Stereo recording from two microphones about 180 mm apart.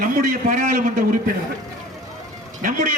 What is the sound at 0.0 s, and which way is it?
Speech, 50° right (ahead or behind).